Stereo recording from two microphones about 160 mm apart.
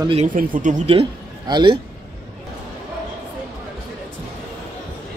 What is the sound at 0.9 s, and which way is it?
Speech, 30° right (ahead or behind).